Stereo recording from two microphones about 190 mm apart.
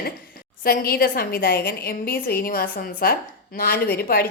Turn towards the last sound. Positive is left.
turn(degrees=55)  # may be behind; listen again after turning